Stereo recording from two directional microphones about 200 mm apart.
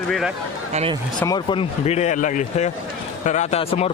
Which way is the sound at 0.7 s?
30° right (ahead or behind).